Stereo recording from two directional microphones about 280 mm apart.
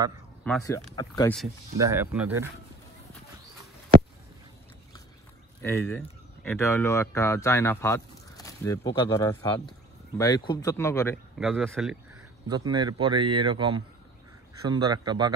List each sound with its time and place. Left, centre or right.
0.4 s speech: centre
1.8 s speech: centre
5.6 s speech: centre
11.3 s speech: centre
12.4 s speech: centre